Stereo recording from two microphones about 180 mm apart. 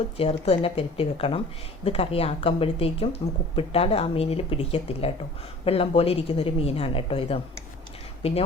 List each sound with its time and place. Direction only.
0.2 s a woman's voice: 35° left (ahead or behind)